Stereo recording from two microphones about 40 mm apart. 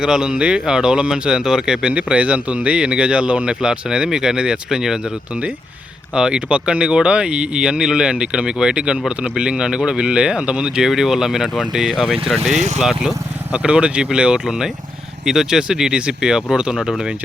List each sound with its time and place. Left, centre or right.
0.0 s speech: centre
6.1 s speech: right
13.5 s speech: right
14.4 s speech: centre